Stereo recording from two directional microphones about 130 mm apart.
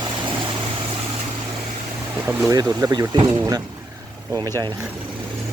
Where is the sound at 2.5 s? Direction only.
30° right (ahead or behind).